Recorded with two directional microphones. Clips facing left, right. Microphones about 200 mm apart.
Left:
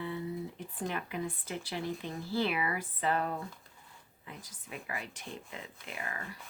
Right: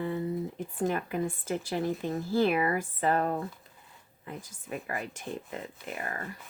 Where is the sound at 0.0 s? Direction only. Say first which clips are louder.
Right 6 dB; 45° right (ahead or behind).